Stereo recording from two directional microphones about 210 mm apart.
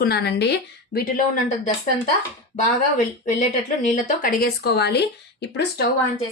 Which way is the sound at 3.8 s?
40° left (ahead or behind).